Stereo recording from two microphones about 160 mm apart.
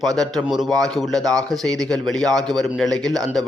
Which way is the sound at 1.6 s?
Centre (ahead or behind).